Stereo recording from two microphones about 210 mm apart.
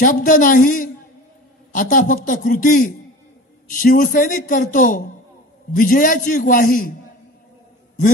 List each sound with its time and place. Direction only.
0.0 s a man's voice: 40° left (ahead or behind)